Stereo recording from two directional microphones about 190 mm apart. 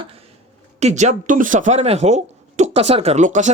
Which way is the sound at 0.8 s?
35° right (ahead or behind).